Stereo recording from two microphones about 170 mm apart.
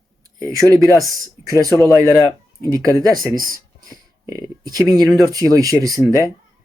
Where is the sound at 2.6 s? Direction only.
20° right (ahead or behind).